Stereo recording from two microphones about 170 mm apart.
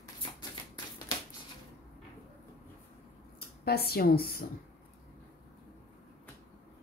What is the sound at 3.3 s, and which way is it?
Speech, 65° left (ahead or behind).